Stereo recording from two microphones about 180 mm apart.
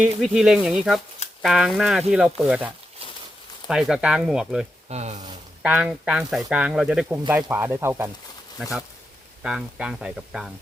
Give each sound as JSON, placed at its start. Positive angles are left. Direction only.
{"t": 0.0, "sound": "speech", "side_deg": 0}
{"t": 4.9, "sound": "speech", "side_deg": -40}
{"t": 5.6, "sound": "speech", "side_deg": -5}
{"t": 9.4, "sound": "speech", "side_deg": -5}